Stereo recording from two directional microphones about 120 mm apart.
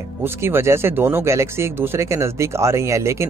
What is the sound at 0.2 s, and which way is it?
Speech, 20° right (ahead or behind).